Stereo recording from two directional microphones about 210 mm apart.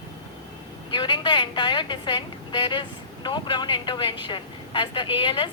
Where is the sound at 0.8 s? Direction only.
20° left (ahead or behind).